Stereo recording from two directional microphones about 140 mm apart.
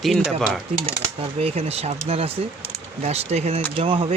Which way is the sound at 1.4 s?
45° right (ahead or behind).